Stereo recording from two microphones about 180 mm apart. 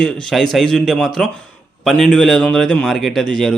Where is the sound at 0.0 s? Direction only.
Centre (ahead or behind).